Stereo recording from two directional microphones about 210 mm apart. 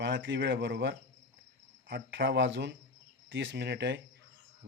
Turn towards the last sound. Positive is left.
turn(degrees=-55)  # may be behind; listen again after turning